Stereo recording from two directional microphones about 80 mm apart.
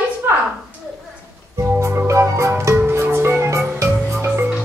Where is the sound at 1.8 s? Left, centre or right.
Right.